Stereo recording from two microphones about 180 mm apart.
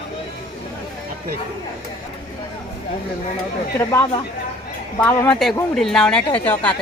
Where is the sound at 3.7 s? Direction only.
15° left (ahead or behind).